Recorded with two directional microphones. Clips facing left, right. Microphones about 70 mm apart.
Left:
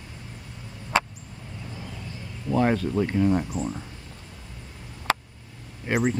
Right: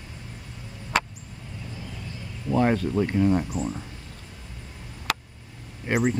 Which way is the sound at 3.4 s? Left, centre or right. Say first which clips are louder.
Even; centre.